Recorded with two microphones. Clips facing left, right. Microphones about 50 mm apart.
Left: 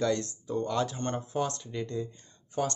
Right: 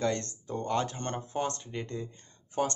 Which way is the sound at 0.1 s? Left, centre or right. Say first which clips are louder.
Left 4 dB; right.